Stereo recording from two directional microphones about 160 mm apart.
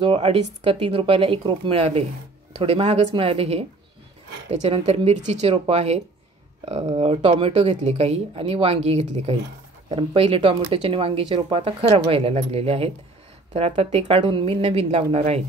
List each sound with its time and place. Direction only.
0.0 s speech: 35° right (ahead or behind)